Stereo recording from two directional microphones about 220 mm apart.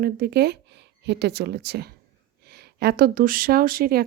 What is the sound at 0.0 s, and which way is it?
A woman's voice, 45° right (ahead or behind).